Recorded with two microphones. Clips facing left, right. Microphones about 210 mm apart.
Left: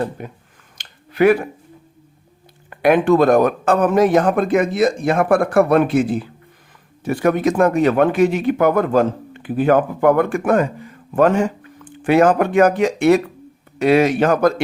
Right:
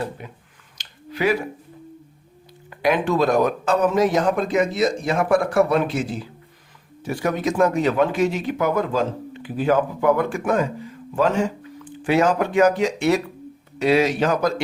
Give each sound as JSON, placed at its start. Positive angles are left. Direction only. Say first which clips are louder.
{"t": 0.2, "sound": "speech", "louder": "left 6 dB", "side_deg": 50}
{"t": 0.8, "sound": "a sound", "louder": "left 9 dB", "side_deg": 55}
{"t": 2.6, "sound": "speech", "louder": "left 7 dB", "side_deg": 55}